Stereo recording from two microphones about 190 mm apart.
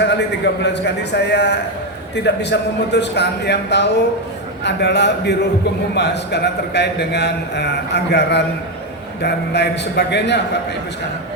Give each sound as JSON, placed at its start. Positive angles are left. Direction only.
{"t": 0.0, "sound": "a man's voice", "side_deg": 65}